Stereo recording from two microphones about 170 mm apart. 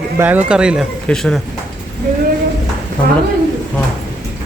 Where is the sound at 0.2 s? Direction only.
10° right (ahead or behind).